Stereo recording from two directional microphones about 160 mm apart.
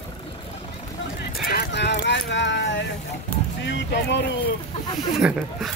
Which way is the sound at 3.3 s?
10° left (ahead or behind).